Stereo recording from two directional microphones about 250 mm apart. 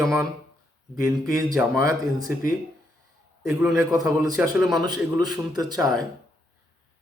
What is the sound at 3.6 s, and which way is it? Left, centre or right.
Speech, centre.